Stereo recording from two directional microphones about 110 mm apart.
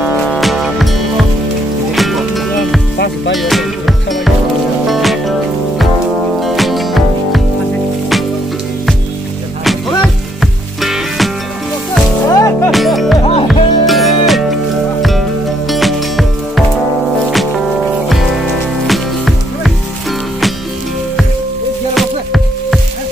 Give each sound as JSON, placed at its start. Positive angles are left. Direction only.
{"t": 0.3, "sound": "music", "side_deg": 0}
{"t": 6.4, "sound": "music", "side_deg": 0}
{"t": 9.7, "sound": "music", "side_deg": 0}
{"t": 12.3, "sound": "music", "side_deg": 30}
{"t": 12.7, "sound": "music", "side_deg": 0}
{"t": 13.2, "sound": "music", "side_deg": 60}
{"t": 13.5, "sound": "music", "side_deg": 0}
{"t": 18.9, "sound": "music", "side_deg": 0}
{"t": 21.9, "sound": "music", "side_deg": 0}